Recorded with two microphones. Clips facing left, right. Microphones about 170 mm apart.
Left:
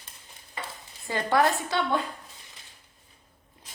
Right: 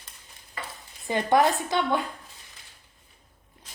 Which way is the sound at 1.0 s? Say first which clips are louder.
Right 2 dB; 20° right (ahead or behind).